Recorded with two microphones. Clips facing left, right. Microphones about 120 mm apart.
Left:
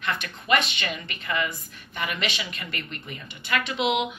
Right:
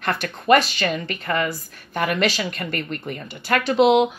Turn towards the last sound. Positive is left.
turn(degrees=-35)  # may be behind; listen again after turning